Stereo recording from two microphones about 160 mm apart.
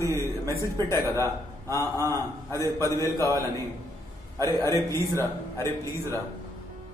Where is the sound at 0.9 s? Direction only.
15° left (ahead or behind).